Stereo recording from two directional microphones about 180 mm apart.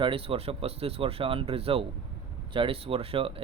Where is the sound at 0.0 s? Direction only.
30° right (ahead or behind).